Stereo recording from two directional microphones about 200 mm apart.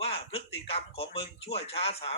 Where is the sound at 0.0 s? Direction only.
30° left (ahead or behind).